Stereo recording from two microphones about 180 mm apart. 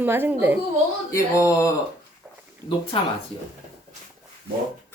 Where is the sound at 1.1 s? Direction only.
15° left (ahead or behind).